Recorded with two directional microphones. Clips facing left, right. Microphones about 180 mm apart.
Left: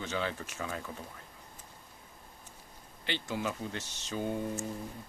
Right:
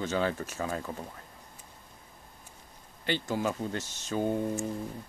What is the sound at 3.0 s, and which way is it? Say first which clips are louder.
Speech: right 5 dB; 45° right (ahead or behind).